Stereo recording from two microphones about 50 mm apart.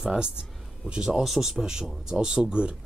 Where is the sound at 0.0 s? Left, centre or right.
Centre.